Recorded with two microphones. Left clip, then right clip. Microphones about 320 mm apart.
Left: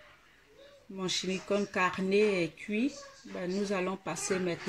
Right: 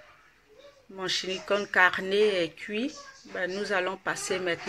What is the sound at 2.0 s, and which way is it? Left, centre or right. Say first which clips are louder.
Speech: right 3 dB; right.